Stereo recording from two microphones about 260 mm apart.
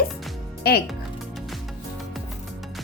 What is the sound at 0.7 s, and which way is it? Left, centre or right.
Speech, left.